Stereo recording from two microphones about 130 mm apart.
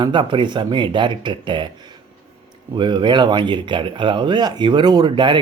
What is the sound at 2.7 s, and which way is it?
Speech, 35° right (ahead or behind).